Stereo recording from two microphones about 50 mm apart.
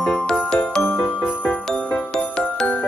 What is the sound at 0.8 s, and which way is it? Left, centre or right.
Jingle bell, left.